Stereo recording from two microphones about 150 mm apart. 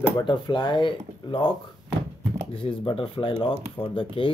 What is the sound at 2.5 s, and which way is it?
Speech, 35° left (ahead or behind).